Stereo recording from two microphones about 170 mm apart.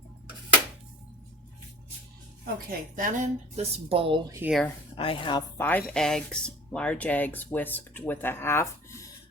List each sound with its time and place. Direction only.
2.6 s speech: 55° right (ahead or behind); by 4.2 s 30° right (ahead or behind)
4.4 s speech: 10° right (ahead or behind)
4.9 s a woman's voice: 30° left (ahead or behind)
5.5 s speech: 10° left (ahead or behind)